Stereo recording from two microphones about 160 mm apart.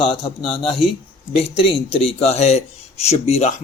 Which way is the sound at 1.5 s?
35° left (ahead or behind).